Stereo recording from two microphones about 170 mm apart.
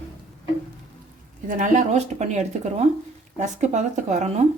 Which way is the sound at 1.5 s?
45° right (ahead or behind).